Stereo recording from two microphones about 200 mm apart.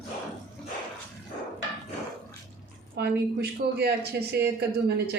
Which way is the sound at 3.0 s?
55° right (ahead or behind).